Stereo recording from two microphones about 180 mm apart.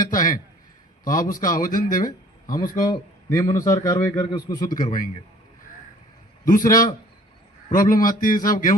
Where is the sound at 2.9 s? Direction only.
20° left (ahead or behind).